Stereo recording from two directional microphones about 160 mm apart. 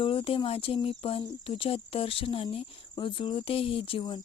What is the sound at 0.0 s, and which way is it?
Speech, 35° left (ahead or behind).